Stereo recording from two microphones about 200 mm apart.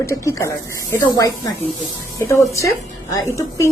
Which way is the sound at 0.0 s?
15° left (ahead or behind).